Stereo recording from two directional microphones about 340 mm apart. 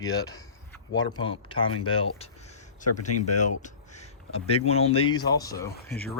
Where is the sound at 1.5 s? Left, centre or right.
Centre.